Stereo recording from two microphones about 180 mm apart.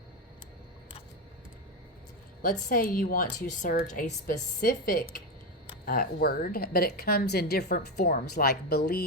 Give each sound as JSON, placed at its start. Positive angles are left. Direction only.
{"t": 2.4, "sound": "a woman's voice", "side_deg": 55}